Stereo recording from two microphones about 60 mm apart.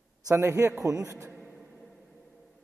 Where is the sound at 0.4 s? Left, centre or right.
Right.